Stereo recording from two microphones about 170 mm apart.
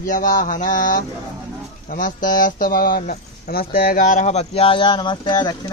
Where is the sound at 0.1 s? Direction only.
55° left (ahead or behind).